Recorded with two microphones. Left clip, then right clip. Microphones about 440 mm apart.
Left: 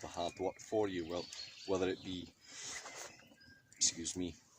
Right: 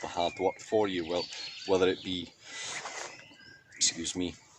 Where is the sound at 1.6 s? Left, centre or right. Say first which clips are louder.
Right 10 dB; right.